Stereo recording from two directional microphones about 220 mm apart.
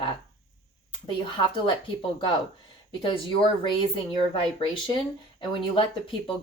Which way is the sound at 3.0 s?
25° left (ahead or behind).